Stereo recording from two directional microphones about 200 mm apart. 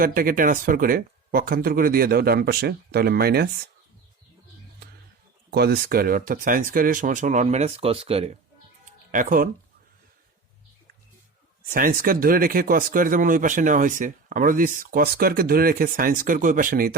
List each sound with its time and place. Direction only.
0.0 s speech: 45° right (ahead or behind)
5.5 s speech: 50° right (ahead or behind); by 8.3 s 30° right (ahead or behind)
8.8 s music: 45° right (ahead or behind)
11.7 s speech: 45° right (ahead or behind)